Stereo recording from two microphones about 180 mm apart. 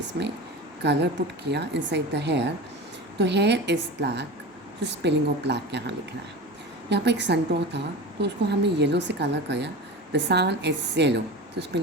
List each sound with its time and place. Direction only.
0.8 s a woman's voice: 70° right (ahead or behind)
6.9 s a woman's voice: 70° right (ahead or behind)